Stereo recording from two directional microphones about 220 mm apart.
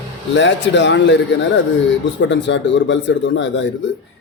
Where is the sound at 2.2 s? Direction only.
55° left (ahead or behind).